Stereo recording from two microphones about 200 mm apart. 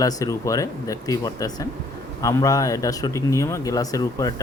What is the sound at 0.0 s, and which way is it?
Speech, 15° left (ahead or behind).